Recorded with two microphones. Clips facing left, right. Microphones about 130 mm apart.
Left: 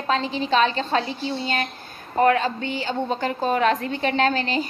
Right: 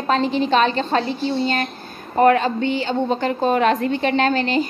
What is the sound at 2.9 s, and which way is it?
Speech, 25° right (ahead or behind).